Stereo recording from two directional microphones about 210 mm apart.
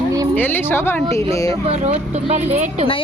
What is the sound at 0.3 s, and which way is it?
Speech, 10° left (ahead or behind).